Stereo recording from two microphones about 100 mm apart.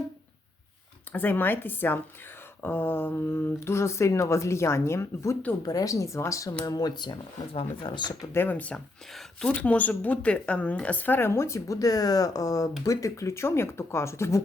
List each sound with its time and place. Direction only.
1.1 s speech: 20° left (ahead or behind); by 7.2 s 50° left (ahead or behind)
7.5 s speech: 60° left (ahead or behind)
8.2 s speech: 25° left (ahead or behind)